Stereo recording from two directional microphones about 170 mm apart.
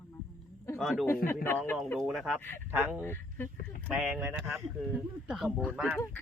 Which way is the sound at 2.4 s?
10° left (ahead or behind).